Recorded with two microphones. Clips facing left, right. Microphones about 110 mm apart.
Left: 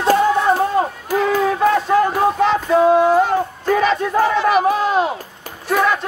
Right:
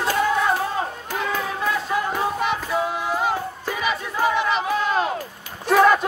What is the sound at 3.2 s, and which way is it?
Crowd, 55° left (ahead or behind).